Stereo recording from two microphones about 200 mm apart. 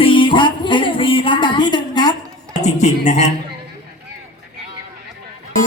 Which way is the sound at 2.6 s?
35° left (ahead or behind).